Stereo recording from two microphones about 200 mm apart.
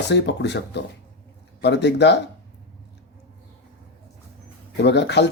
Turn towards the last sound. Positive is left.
turn(degrees=60)  # may be behind; listen again after turning